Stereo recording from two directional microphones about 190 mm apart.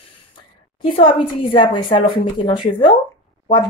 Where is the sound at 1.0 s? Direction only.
25° left (ahead or behind).